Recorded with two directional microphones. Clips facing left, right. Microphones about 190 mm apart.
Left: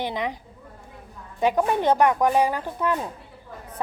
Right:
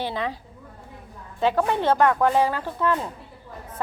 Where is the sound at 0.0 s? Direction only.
15° left (ahead or behind).